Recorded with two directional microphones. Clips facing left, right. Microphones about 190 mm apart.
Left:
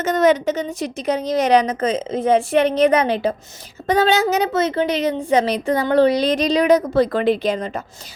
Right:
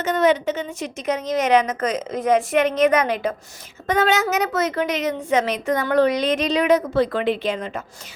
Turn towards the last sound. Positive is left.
turn(degrees=35)  # may be behind; listen again after turning